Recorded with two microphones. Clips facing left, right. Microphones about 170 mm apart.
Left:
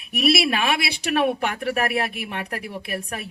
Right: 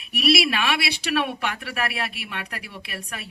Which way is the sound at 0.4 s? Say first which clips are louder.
Left 2 dB; 40° left (ahead or behind).